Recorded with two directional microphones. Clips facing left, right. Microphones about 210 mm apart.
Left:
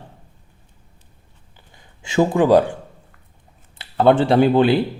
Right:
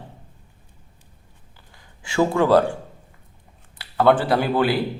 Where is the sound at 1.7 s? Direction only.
20° left (ahead or behind).